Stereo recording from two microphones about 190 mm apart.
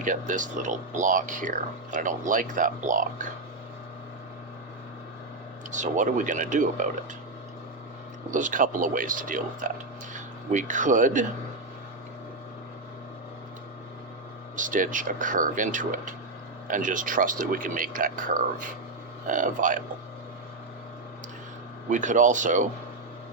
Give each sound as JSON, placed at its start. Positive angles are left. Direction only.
{"t": 0.0, "sound": "speech", "side_deg": -40}
{"t": 5.7, "sound": "speech", "side_deg": -40}
{"t": 8.3, "sound": "speech", "side_deg": -40}
{"t": 14.5, "sound": "speech", "side_deg": -45}
{"t": 21.8, "sound": "speech", "side_deg": -40}